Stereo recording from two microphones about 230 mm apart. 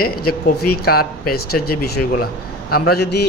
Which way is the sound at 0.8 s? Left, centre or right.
Left.